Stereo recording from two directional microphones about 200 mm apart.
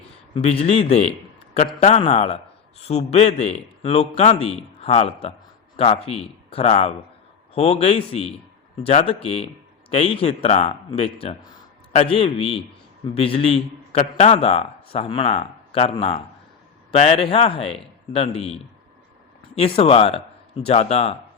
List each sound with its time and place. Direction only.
0.3 s a man's voice: 30° left (ahead or behind)
19.5 s speech: 30° left (ahead or behind)